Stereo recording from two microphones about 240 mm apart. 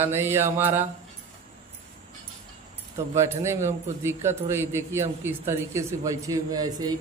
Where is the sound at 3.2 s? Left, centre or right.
Centre.